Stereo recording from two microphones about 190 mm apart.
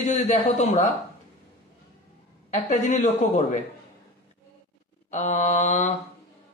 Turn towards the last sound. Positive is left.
turn(degrees=35)  # may be behind; listen again after turning